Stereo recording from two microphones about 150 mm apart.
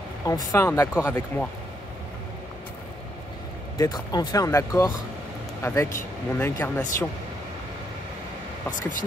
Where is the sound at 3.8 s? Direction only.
25° left (ahead or behind).